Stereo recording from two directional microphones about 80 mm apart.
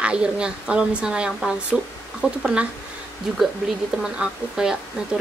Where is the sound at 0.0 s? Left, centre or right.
Centre.